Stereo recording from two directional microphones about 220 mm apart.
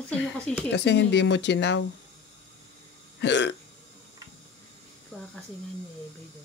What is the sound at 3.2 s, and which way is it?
Hiccup, 55° left (ahead or behind).